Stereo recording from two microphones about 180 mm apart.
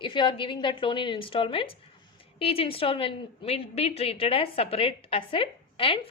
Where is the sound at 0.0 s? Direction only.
25° left (ahead or behind).